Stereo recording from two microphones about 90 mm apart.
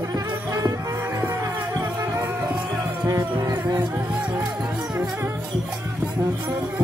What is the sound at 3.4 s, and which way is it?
Music, 40° right (ahead or behind).